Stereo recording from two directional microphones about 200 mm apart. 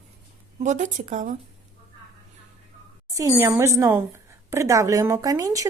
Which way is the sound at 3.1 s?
15° right (ahead or behind).